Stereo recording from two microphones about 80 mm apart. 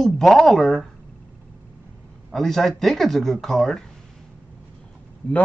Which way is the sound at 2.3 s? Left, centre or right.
Centre.